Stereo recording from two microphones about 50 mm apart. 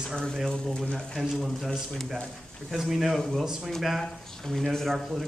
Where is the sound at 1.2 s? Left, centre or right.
Centre.